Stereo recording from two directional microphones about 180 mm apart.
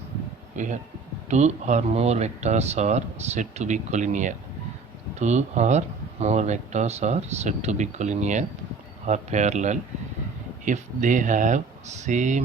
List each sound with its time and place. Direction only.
0.5 s speech: 45° right (ahead or behind)